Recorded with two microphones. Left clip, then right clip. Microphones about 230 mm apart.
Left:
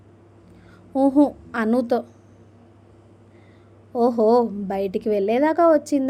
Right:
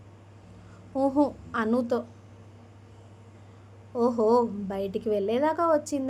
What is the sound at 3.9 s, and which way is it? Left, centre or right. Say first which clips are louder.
A woman's voice: left 5 dB; centre.